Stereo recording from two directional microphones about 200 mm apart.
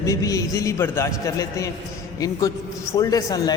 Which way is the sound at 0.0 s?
15° left (ahead or behind).